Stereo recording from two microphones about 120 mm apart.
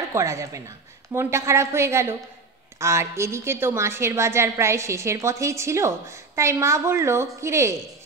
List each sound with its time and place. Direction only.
0.1 s a woman's voice: 25° right (ahead or behind)